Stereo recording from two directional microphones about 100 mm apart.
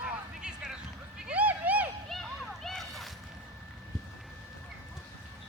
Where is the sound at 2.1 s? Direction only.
Centre (ahead or behind).